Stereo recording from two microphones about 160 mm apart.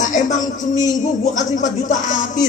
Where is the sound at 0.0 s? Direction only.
50° left (ahead or behind).